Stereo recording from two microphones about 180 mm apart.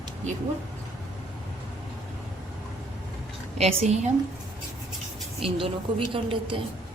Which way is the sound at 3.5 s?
35° right (ahead or behind).